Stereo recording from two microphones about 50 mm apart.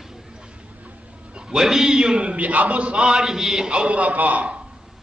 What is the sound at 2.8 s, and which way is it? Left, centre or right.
Speech, centre.